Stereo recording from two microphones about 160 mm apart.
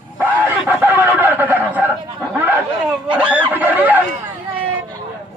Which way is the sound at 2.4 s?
10° right (ahead or behind).